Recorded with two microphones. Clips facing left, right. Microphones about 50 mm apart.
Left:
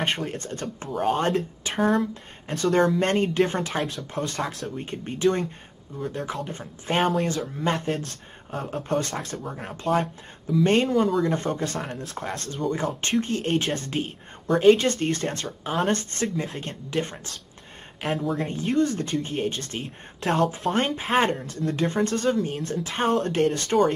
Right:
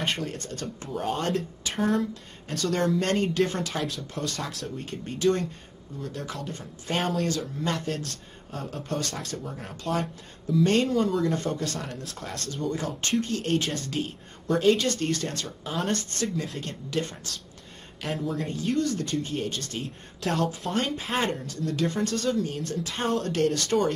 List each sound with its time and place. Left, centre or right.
0.0 s speech: left
0.8 s speech: centre
1.2 s speech: left
1.8 s speech: centre
2.4 s speech: left
18.0 s speech: centre
18.4 s speech: left